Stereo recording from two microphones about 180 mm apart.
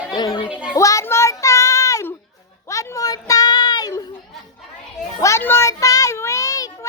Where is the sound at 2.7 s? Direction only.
20° left (ahead or behind).